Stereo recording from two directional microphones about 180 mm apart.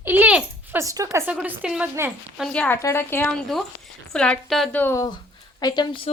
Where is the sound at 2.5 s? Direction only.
10° left (ahead or behind).